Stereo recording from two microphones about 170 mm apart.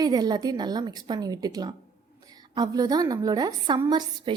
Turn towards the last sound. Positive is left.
turn(degrees=-25)  # may be behind; listen again after turning